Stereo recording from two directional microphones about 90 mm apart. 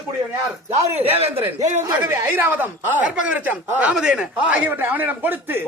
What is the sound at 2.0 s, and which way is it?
A man's voice, 25° right (ahead or behind).